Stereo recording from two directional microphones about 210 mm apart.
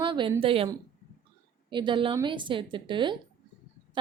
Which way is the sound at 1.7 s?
25° right (ahead or behind).